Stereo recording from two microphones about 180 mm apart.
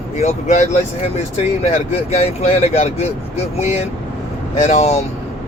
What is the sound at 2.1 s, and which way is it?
Speech, 35° left (ahead or behind).